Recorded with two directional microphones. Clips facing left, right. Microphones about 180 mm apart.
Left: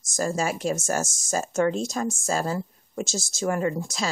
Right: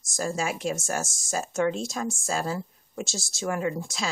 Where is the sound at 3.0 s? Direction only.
Centre (ahead or behind).